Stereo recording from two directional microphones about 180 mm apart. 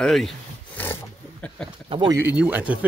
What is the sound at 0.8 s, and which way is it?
Speech, 10° left (ahead or behind).